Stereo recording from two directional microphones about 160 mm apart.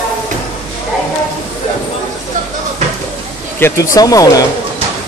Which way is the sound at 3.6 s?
20° left (ahead or behind).